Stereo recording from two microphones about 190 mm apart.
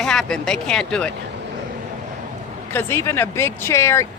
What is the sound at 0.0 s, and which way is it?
Speech, 5° left (ahead or behind).